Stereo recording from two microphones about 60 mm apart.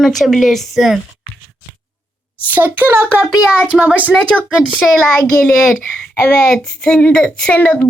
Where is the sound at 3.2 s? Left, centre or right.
Centre.